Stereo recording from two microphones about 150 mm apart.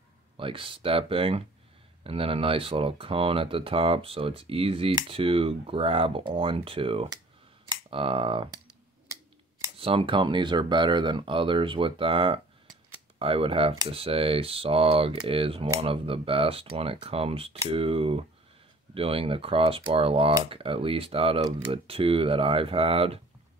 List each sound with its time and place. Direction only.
0.4 s speech: 35° right (ahead or behind)
9.8 s speech: 35° right (ahead or behind)